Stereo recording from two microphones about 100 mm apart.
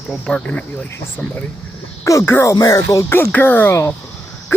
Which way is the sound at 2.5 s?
40° left (ahead or behind).